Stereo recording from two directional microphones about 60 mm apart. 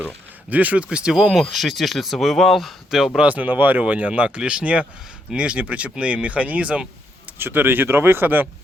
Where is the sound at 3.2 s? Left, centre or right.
Right.